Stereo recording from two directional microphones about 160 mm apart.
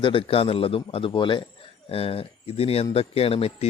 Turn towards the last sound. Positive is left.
turn(degrees=35)  # may be behind; listen again after turning